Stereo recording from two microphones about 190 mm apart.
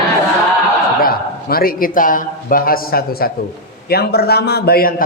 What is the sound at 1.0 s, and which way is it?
A man's voice, 50° left (ahead or behind).